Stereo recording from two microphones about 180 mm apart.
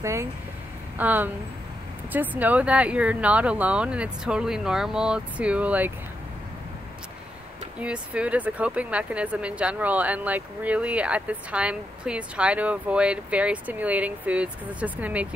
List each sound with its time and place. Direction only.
0.0 s a woman's voice: 15° right (ahead or behind)
7.8 s a woman's voice: 5° right (ahead or behind)